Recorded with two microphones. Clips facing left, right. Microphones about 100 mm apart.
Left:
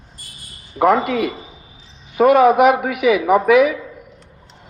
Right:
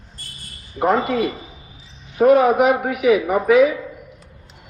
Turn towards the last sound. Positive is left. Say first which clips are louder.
# left 2 dB
turn(degrees=85)